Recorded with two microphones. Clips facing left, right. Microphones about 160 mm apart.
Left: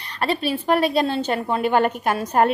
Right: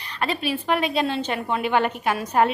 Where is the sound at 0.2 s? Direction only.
35° left (ahead or behind).